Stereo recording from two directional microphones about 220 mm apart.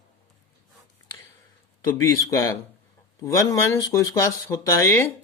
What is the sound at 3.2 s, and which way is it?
Speech, 15° left (ahead or behind).